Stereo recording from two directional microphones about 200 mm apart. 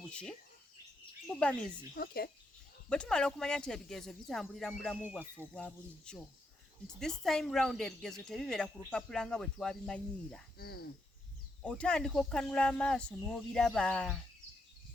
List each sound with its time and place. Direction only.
0.1 s speech: 5° left (ahead or behind)
1.4 s speech: 5° left (ahead or behind)
2.0 s speech: 50° left (ahead or behind)
2.9 s speech: 5° left (ahead or behind)
5.0 s speech: 10° right (ahead or behind)
5.5 s speech: 5° left (ahead or behind)
10.6 s speech: 50° left (ahead or behind)
11.6 s speech: 5° left (ahead or behind)